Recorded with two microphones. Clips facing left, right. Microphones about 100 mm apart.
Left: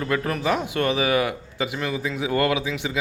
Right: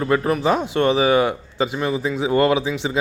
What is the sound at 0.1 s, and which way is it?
Speech, 30° right (ahead or behind).